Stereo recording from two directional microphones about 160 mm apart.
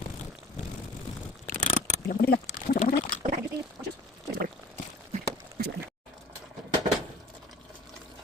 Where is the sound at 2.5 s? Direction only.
45° left (ahead or behind).